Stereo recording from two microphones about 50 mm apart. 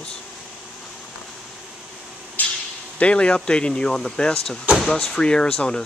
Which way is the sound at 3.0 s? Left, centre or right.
Left.